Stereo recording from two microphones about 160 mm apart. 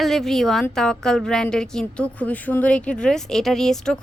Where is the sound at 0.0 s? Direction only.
Centre (ahead or behind).